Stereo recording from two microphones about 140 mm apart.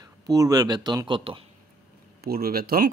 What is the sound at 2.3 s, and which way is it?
Speech, 90° right.